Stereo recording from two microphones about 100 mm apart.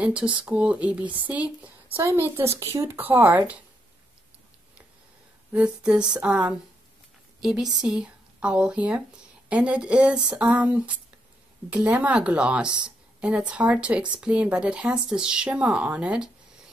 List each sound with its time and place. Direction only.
0.0 s a woman's voice: 10° right (ahead or behind)
5.5 s a woman's voice: 10° right (ahead or behind)